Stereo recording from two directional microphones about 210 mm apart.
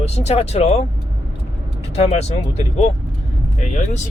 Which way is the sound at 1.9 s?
30° left (ahead or behind).